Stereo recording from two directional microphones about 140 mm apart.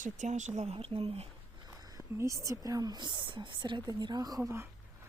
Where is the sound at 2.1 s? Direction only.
20° right (ahead or behind).